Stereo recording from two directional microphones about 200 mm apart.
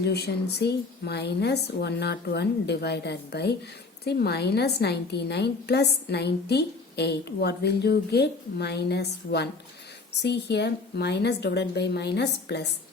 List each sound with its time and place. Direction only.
0.0 s a woman's voice: 55° left (ahead or behind)